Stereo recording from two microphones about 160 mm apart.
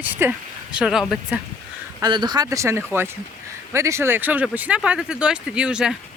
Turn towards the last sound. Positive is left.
turn(degrees=-5)  # may be behind; listen again after turning